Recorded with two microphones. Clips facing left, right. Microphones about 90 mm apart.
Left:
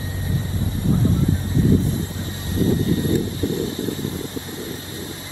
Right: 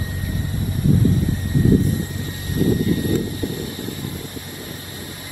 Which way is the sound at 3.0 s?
25° left (ahead or behind).